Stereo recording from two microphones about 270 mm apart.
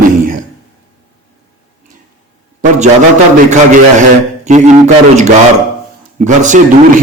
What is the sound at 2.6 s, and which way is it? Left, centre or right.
Speech, right.